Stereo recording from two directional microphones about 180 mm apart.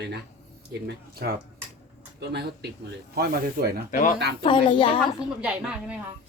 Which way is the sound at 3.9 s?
50° left (ahead or behind).